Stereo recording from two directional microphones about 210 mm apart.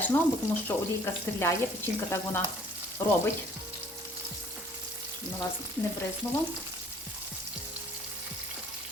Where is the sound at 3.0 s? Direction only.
10° left (ahead or behind).